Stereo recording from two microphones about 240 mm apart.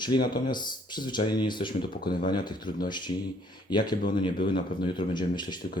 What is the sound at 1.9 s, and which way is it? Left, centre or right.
Speech, left.